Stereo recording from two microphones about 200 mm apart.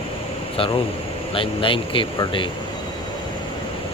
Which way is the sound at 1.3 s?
25° left (ahead or behind).